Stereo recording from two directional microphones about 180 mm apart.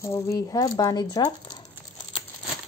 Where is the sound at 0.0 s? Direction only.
15° left (ahead or behind).